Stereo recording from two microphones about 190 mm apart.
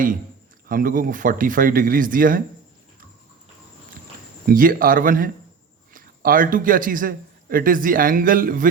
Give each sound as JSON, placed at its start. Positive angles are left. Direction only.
{"t": 0.7, "sound": "speech", "side_deg": -45}
{"t": 4.4, "sound": "a man's voice", "side_deg": -50}